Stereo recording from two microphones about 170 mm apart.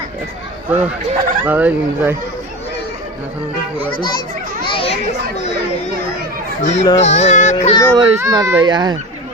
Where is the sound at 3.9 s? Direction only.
25° left (ahead or behind).